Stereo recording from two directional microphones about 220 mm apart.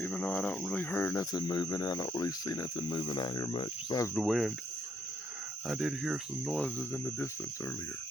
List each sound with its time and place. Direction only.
0.0 s speech: 10° left (ahead or behind)
4.1 s speech: centre (ahead or behind)
5.6 s speech: 5° right (ahead or behind)